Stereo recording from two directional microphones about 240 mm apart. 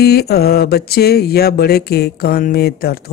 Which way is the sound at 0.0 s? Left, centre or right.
Left.